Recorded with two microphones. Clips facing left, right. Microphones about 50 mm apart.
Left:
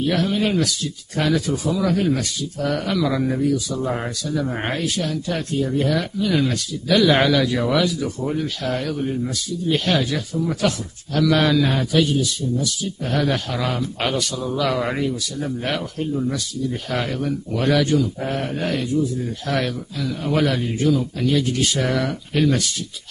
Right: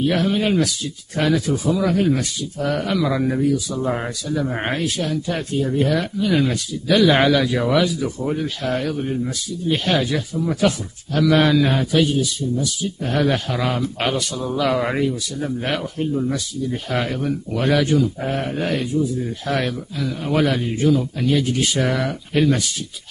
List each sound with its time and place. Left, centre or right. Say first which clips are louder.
0.1 s a man's voice: right 1 dB; centre
12.0 s a man's voice: right 1 dB; centre
21.3 s a man's voice: right 1 dB; centre